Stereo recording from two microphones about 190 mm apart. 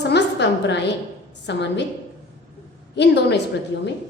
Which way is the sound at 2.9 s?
65° left (ahead or behind).